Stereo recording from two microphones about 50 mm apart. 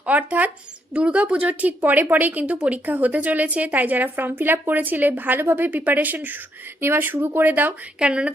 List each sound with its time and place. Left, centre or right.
0.0 s speech: right
6.8 s speech: right
7.9 s speech: right